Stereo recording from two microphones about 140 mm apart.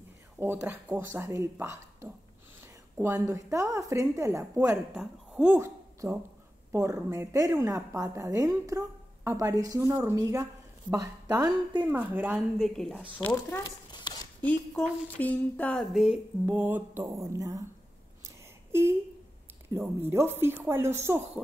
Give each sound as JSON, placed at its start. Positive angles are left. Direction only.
{"t": 0.4, "sound": "a woman's voice", "side_deg": -15}
{"t": 4.9, "sound": "a woman's voice", "side_deg": -5}
{"t": 5.5, "sound": "a woman's voice", "side_deg": -20}
{"t": 11.8, "sound": "speech", "side_deg": -10}
{"t": 13.3, "sound": "a sound", "side_deg": 25}
{"t": 14.4, "sound": "a sound", "side_deg": 10}
{"t": 16.4, "sound": "speech", "side_deg": -15}
{"t": 18.2, "sound": "a sound", "side_deg": -15}
{"t": 19.8, "sound": "speech", "side_deg": -15}